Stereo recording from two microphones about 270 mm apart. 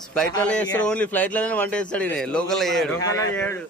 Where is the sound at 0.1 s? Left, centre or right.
Centre.